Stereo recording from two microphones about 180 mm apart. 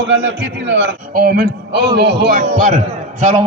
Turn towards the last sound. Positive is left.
turn(degrees=-45)  # may be behind; listen again after turning